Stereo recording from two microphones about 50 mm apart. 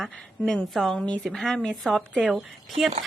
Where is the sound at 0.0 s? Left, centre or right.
Centre.